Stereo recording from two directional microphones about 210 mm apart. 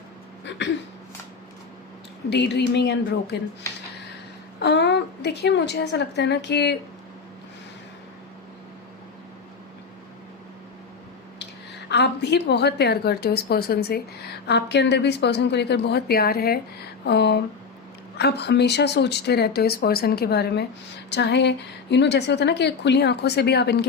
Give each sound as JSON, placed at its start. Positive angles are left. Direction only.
{"t": 2.3, "sound": "speech", "side_deg": 55}
{"t": 4.6, "sound": "speech", "side_deg": 55}
{"t": 11.9, "sound": "a woman's voice", "side_deg": 55}